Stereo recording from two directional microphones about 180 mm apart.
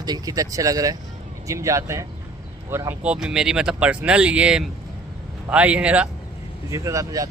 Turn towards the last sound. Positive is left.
turn(degrees=-20)  # may be behind; listen again after turning